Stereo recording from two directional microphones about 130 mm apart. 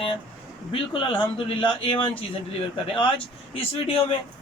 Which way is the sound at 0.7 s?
40° left (ahead or behind).